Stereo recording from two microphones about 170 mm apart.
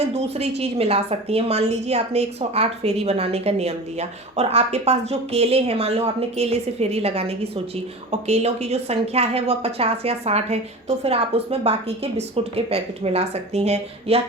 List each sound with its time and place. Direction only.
0.0 s a woman's voice: 40° right (ahead or behind)